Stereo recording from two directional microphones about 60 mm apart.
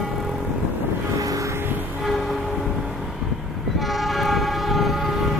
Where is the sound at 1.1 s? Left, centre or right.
Right.